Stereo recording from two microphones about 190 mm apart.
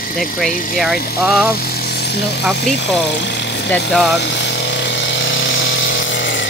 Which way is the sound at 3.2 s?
65° left (ahead or behind).